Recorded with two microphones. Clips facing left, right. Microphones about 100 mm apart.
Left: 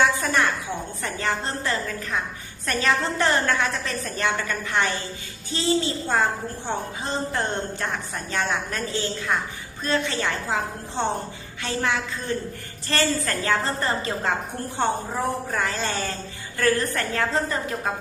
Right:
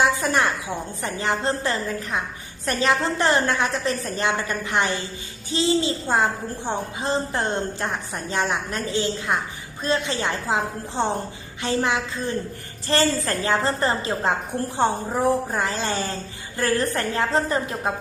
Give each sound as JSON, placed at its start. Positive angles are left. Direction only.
{"t": 0.0, "sound": "a sound", "side_deg": -25}
{"t": 1.0, "sound": "a woman's voice", "side_deg": -20}
{"t": 11.6, "sound": "a woman's voice", "side_deg": -20}